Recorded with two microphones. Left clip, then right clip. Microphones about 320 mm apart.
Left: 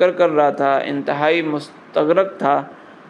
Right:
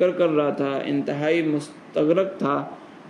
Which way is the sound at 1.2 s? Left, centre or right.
Centre.